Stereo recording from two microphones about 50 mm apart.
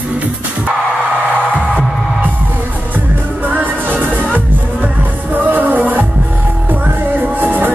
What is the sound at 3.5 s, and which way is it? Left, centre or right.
Music, right.